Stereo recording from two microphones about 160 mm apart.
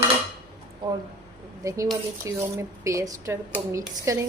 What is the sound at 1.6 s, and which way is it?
Speech, 20° right (ahead or behind).